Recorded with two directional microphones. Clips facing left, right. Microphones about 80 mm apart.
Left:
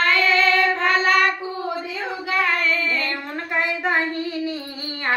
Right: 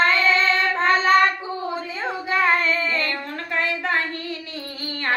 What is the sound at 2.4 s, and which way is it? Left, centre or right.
Child singing, right.